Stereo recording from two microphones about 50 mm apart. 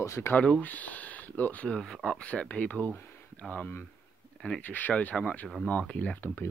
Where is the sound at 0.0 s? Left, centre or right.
Left.